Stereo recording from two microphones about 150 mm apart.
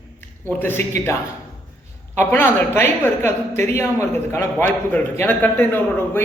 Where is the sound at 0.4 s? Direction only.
15° left (ahead or behind).